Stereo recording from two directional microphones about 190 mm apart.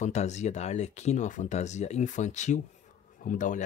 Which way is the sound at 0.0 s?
40° left (ahead or behind).